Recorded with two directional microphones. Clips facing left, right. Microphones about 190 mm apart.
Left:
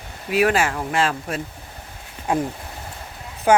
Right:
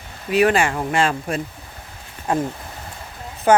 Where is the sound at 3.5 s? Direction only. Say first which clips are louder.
Right 1 dB; 10° left (ahead or behind).